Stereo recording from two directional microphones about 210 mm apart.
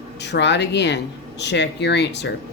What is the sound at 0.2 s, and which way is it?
A woman's voice, 55° left (ahead or behind).